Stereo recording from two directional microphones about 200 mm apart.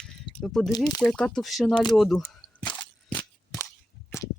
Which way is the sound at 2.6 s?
20° left (ahead or behind).